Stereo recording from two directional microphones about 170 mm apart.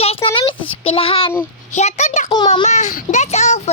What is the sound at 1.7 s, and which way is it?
A child's voice, 45° left (ahead or behind).